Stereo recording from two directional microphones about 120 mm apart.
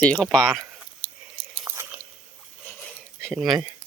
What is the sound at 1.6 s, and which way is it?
Chewing, 20° right (ahead or behind).